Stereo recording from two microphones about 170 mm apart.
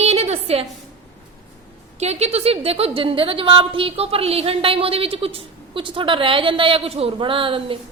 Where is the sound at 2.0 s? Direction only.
40° right (ahead or behind).